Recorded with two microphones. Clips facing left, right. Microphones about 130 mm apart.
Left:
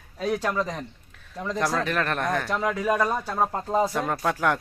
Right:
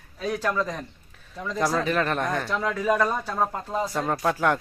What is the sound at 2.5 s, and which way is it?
Speech, 15° left (ahead or behind).